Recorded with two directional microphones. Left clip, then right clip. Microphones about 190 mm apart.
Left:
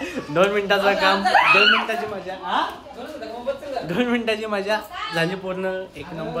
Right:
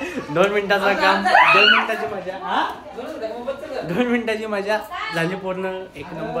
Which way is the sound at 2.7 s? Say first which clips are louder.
Right 3 dB; 10° right (ahead or behind).